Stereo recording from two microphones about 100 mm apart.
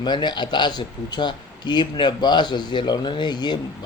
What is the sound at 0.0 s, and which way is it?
A man's voice, 50° left (ahead or behind).